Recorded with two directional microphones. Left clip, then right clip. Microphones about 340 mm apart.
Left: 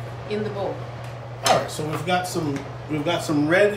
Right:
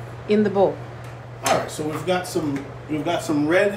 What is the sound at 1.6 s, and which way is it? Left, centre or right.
Speech, centre.